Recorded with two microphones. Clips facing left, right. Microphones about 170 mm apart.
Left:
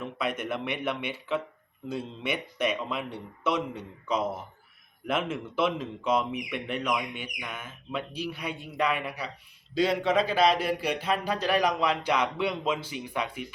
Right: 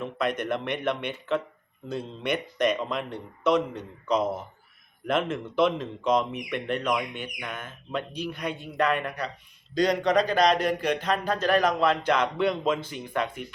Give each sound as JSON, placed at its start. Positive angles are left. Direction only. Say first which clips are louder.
{"t": 0.0, "sound": "a man's voice", "louder": "right 3 dB", "side_deg": 5}